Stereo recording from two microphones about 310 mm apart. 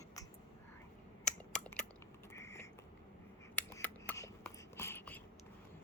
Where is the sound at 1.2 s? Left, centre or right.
Centre.